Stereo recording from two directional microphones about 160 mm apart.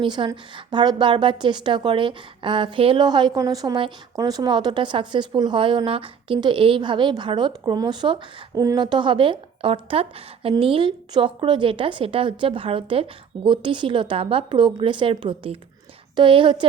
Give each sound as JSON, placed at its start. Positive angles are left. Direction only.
{"t": 0.0, "sound": "a woman's voice", "side_deg": -30}